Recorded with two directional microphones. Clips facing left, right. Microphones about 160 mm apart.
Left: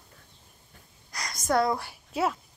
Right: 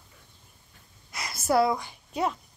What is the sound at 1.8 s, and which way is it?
Speech, 5° left (ahead or behind).